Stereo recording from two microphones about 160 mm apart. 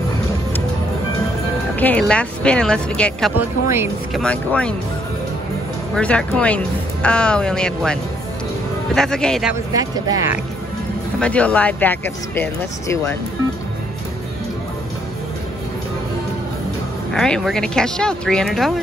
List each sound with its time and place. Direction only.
1.8 s speech: 10° left (ahead or behind)
5.9 s speech: 5° left (ahead or behind)
9.8 s speech: 20° right (ahead or behind)
11.1 s speech: 10° left (ahead or behind)
17.1 s speech: 5° left (ahead or behind)